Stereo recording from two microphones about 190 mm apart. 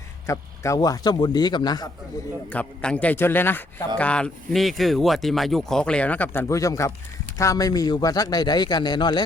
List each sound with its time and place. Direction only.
0.3 s a man's voice: 15° left (ahead or behind)
2.5 s a man's voice: 5° left (ahead or behind)